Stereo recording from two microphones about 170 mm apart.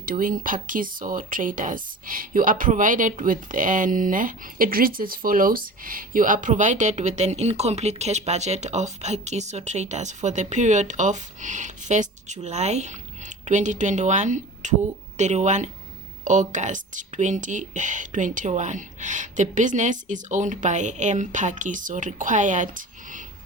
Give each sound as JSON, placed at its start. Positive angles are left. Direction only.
{"t": 0.0, "sound": "speech", "side_deg": -55}